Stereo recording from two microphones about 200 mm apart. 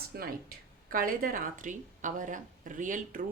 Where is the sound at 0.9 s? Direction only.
45° right (ahead or behind).